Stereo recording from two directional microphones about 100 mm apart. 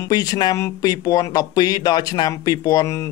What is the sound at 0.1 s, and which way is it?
Speech, 40° left (ahead or behind).